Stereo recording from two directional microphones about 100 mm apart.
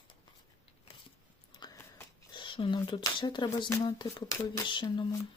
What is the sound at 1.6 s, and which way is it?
Biting, 45° left (ahead or behind).